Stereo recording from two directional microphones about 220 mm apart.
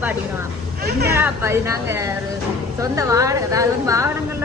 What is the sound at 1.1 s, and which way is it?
A woman's voice, 10° right (ahead or behind).